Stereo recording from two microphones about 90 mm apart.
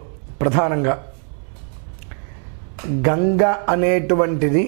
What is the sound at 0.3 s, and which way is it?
Speech, 15° right (ahead or behind).